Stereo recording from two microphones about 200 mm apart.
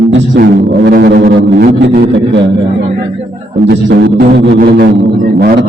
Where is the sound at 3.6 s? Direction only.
55° right (ahead or behind).